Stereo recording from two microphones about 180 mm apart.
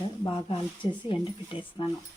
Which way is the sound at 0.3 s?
30° left (ahead or behind).